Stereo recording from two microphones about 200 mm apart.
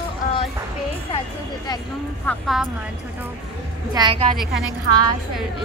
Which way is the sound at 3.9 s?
25° right (ahead or behind).